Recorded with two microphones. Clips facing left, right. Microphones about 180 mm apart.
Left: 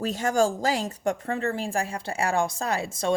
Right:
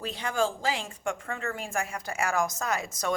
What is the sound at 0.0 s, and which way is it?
A woman's voice, 45° left (ahead or behind).